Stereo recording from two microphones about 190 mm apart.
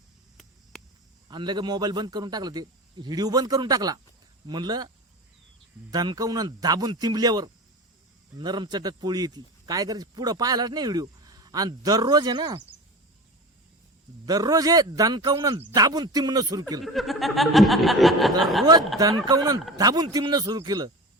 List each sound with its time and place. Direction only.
1.3 s speech: 25° right (ahead or behind)
5.9 s speech: 20° right (ahead or behind)
14.3 s speech: 20° right (ahead or behind)
16.8 s a sound: centre (ahead or behind)
18.6 s speech: 20° right (ahead or behind)